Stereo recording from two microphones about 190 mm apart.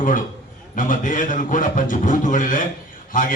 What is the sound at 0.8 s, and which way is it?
A man's voice, 45° left (ahead or behind).